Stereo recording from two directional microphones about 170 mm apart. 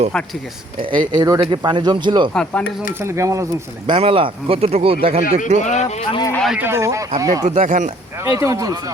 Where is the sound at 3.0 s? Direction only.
15° right (ahead or behind); by 5.6 s 40° right (ahead or behind).